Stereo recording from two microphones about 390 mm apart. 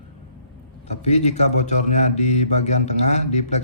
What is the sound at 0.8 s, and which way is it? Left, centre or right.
A man's voice, centre.